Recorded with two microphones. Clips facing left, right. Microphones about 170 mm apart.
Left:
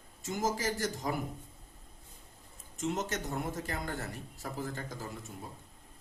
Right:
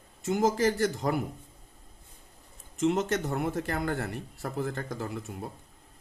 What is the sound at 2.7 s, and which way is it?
Speech, 60° right (ahead or behind).